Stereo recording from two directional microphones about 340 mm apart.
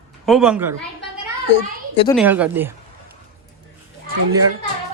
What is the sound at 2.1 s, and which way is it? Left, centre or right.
Speech, centre.